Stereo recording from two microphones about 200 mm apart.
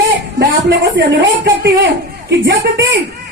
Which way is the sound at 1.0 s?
60° right (ahead or behind).